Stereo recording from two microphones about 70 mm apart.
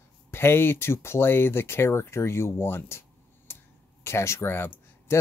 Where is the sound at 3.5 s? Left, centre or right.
Left.